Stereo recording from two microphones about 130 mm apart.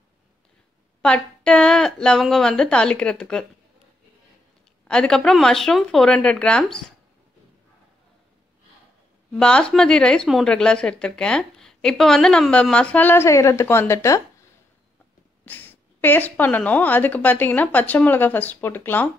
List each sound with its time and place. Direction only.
1.0 s a woman's voice: 5° left (ahead or behind)
4.8 s a woman's voice: 5° left (ahead or behind)
9.3 s a woman's voice: 5° left (ahead or behind); by 14.2 s 25° left (ahead or behind)
15.4 s a woman's voice: 15° left (ahead or behind)